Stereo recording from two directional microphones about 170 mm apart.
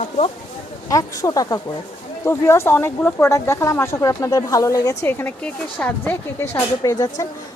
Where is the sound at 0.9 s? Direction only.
20° left (ahead or behind).